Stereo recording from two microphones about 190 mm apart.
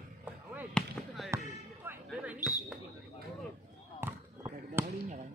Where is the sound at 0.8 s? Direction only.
5° left (ahead or behind).